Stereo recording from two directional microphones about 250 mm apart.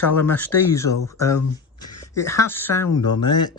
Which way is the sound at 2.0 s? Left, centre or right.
Centre.